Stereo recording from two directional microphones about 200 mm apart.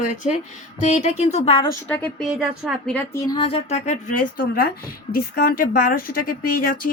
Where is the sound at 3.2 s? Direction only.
25° left (ahead or behind).